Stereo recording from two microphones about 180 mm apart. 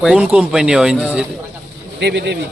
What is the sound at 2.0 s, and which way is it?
Speech, 65° right (ahead or behind).